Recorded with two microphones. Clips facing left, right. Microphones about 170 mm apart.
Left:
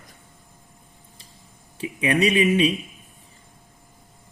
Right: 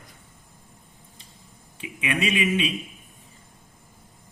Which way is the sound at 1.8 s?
40° left (ahead or behind).